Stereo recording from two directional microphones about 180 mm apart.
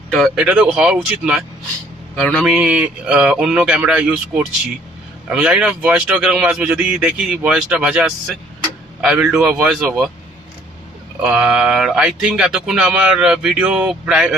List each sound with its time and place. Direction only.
0.1 s speech: centre (ahead or behind)
11.2 s speech: 5° right (ahead or behind)